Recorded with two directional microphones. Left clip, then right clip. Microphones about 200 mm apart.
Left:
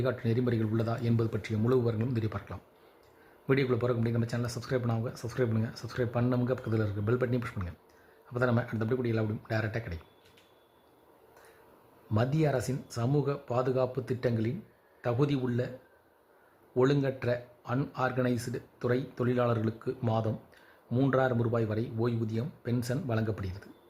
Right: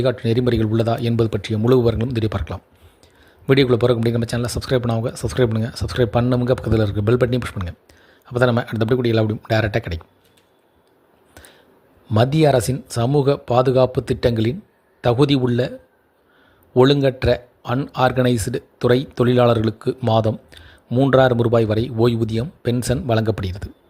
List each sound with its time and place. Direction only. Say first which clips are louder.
0.0 s a man's voice: right 12 dB; 30° right (ahead or behind)
12.1 s a man's voice: right 14 dB; 35° right (ahead or behind)
16.7 s a man's voice: right 13 dB; 35° right (ahead or behind)